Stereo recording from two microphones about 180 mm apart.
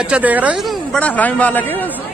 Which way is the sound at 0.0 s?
10° right (ahead or behind).